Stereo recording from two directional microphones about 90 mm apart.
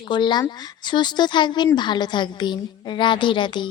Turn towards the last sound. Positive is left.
turn(degrees=60)  # may be behind; listen again after turning